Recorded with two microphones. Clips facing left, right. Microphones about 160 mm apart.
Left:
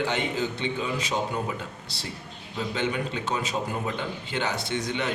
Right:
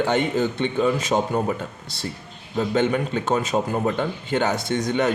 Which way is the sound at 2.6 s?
50° right (ahead or behind).